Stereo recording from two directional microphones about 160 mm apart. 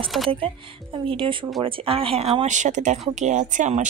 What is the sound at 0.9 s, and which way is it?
Speech, 30° right (ahead or behind).